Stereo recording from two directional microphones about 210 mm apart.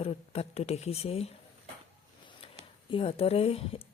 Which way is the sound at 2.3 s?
25° left (ahead or behind).